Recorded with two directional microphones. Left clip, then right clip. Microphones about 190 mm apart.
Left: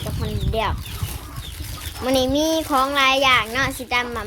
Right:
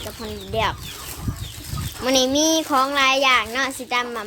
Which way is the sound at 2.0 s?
5° right (ahead or behind).